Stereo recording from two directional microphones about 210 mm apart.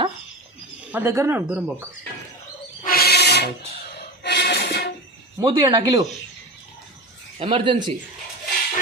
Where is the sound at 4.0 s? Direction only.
55° left (ahead or behind).